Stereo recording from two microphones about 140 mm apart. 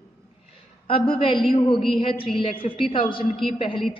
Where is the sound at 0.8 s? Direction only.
40° left (ahead or behind).